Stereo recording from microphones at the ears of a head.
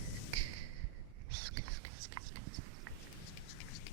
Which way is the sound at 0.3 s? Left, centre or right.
Right.